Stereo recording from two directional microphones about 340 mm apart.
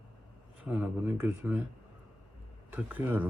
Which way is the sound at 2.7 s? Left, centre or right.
Centre.